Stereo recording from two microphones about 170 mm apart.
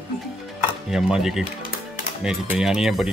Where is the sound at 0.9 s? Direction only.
Centre (ahead or behind).